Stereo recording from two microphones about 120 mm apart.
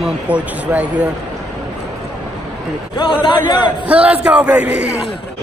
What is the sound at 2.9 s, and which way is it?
Speech, 45° left (ahead or behind).